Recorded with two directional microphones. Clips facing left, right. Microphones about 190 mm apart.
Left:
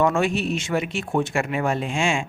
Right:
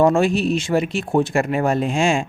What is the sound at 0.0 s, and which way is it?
Speech, 35° right (ahead or behind).